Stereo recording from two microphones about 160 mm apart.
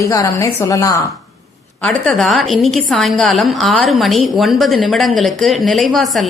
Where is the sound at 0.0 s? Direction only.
20° left (ahead or behind).